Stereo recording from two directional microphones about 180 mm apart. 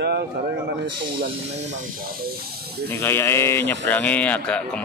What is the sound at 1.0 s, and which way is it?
Speech, 30° right (ahead or behind).